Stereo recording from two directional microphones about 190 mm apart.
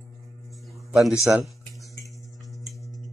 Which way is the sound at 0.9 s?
5° right (ahead or behind).